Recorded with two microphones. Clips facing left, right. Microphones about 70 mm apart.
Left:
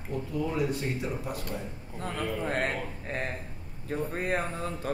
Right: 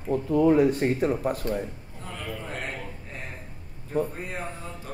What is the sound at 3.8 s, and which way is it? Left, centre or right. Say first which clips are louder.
Speech: right 2 dB; left.